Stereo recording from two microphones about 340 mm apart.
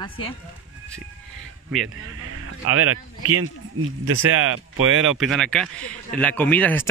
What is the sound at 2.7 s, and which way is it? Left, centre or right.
Speech, right.